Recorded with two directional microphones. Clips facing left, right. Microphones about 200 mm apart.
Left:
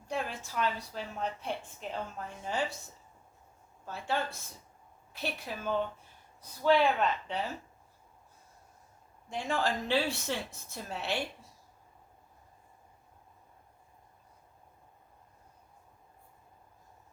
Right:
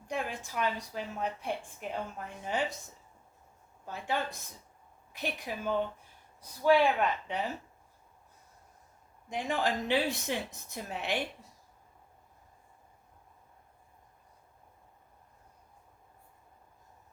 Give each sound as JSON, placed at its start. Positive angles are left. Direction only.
{"t": 0.1, "sound": "a woman's voice", "side_deg": -15}
{"t": 3.8, "sound": "a woman's voice", "side_deg": -15}
{"t": 9.3, "sound": "a woman's voice", "side_deg": -15}